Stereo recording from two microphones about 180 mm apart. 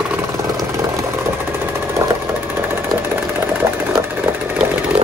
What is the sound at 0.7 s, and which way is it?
Vehicle, 15° right (ahead or behind).